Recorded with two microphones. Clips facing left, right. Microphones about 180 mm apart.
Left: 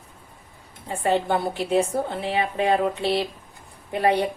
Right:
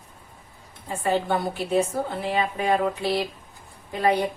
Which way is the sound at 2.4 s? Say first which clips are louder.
Left 3 dB; 30° left (ahead or behind).